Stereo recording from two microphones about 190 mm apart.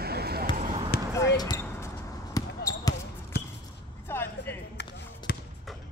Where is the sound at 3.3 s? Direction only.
55° left (ahead or behind).